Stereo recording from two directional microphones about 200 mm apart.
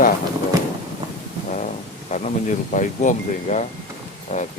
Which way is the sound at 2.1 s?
40° left (ahead or behind).